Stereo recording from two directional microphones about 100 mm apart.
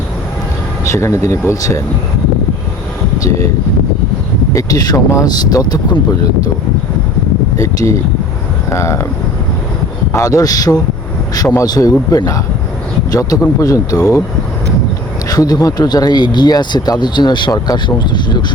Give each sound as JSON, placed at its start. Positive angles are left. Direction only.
{"t": 0.9, "sound": "speech", "side_deg": 30}
{"t": 3.2, "sound": "speech", "side_deg": 30}
{"t": 4.5, "sound": "speech", "side_deg": 40}
{"t": 7.5, "sound": "speech", "side_deg": 30}
{"t": 10.1, "sound": "speech", "side_deg": 35}
{"t": 15.3, "sound": "speech", "side_deg": 40}